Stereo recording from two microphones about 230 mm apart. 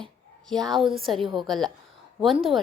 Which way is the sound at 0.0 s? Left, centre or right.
Centre.